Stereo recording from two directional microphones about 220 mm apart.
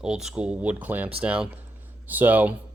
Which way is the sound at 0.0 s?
5° right (ahead or behind).